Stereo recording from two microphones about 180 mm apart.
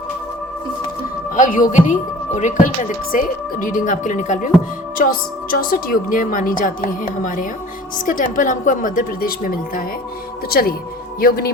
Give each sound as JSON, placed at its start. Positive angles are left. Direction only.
{"t": 1.4, "sound": "a woman's voice", "side_deg": 50}